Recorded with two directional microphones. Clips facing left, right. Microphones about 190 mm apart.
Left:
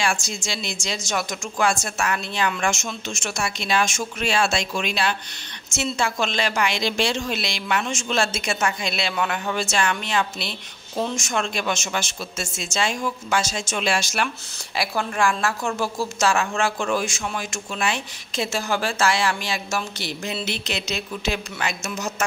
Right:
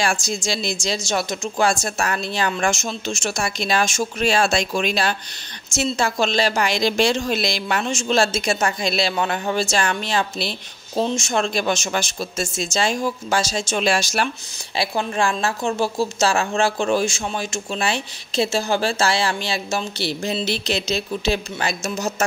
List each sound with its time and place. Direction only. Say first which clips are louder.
0.0 s a woman's voice: right 3 dB; 40° right (ahead or behind)
14.8 s a woman's voice: right 2 dB; 25° right (ahead or behind)